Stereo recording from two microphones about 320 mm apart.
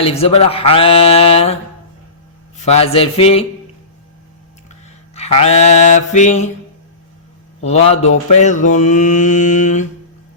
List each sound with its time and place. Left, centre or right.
0.0 s speech: centre
2.6 s speech: centre
5.1 s mantra: centre
7.6 s mantra: centre